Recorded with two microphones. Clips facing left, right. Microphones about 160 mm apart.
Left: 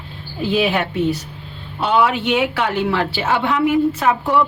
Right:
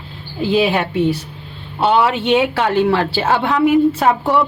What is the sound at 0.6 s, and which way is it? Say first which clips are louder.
A woman's voice: right 2 dB; 30° right (ahead or behind).